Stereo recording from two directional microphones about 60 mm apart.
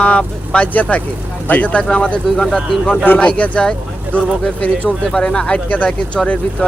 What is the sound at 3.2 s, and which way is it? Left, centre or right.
Speech, left.